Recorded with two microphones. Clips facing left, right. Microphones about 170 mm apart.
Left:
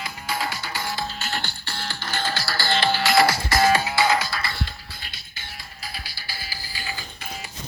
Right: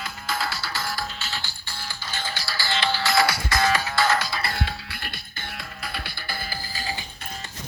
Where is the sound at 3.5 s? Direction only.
30° left (ahead or behind).